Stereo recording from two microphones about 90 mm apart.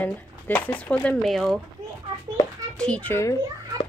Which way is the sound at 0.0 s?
20° left (ahead or behind).